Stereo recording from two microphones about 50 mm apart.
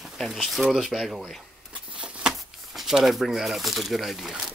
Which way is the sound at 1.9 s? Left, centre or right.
Centre.